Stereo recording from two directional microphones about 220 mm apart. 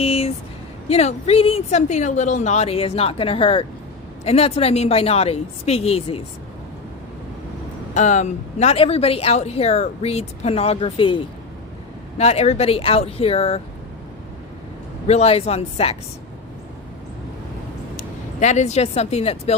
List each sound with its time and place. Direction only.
0.0 s a sound: 25° left (ahead or behind)
0.9 s speech: 30° left (ahead or behind)
7.9 s speech: 35° left (ahead or behind)
15.0 s speech: 30° left (ahead or behind)
17.9 s speech: 30° left (ahead or behind)